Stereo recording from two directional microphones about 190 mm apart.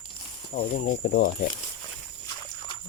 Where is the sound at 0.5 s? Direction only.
45° left (ahead or behind).